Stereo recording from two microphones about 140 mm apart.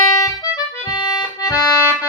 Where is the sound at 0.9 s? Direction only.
30° left (ahead or behind).